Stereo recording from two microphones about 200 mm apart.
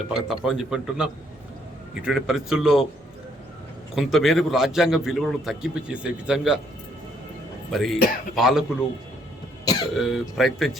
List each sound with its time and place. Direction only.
0.1 s a man's voice: centre (ahead or behind)
3.9 s a man's voice: centre (ahead or behind)
7.7 s a man's voice: centre (ahead or behind)
9.6 s cough: 20° left (ahead or behind)
9.9 s a man's voice: centre (ahead or behind)